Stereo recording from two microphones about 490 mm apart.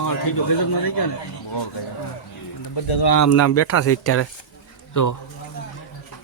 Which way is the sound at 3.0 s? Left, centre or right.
Left.